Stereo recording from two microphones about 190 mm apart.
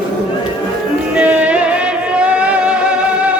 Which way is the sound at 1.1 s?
5° right (ahead or behind).